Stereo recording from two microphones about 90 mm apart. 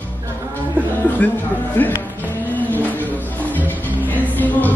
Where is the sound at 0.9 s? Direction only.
20° left (ahead or behind).